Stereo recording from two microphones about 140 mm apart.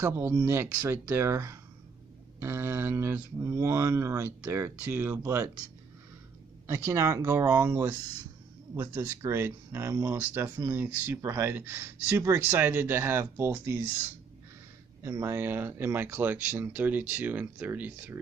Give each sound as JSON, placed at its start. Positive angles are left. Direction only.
{"t": 0.0, "sound": "speech", "side_deg": -15}
{"t": 6.7, "sound": "speech", "side_deg": -20}